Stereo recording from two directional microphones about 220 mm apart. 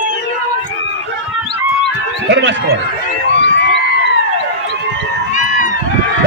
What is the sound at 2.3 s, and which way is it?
Speech, 50° right (ahead or behind).